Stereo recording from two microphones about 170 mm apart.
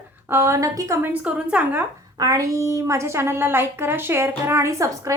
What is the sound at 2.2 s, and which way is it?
A woman's voice, 20° right (ahead or behind).